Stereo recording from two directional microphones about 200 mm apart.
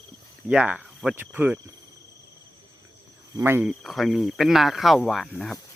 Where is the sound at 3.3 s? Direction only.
10° right (ahead or behind).